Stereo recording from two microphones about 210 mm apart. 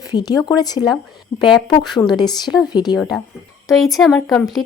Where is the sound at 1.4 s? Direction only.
20° left (ahead or behind).